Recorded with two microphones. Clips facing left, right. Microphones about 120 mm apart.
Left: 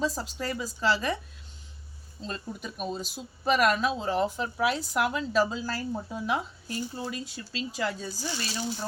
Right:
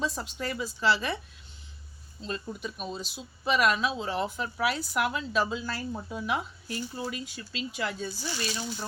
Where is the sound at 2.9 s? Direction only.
45° left (ahead or behind).